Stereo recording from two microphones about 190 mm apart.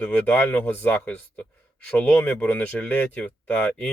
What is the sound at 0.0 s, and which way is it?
Speech, 10° left (ahead or behind).